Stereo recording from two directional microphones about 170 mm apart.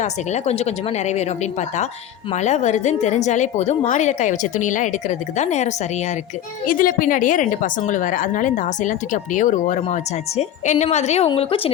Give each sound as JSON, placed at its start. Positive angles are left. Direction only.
{"t": 0.0, "sound": "speech", "side_deg": 40}
{"t": 2.3, "sound": "a woman's voice", "side_deg": 45}
{"t": 6.7, "sound": "a woman's voice", "side_deg": 55}